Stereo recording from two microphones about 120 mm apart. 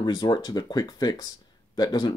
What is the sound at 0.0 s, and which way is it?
Speech, 35° left (ahead or behind).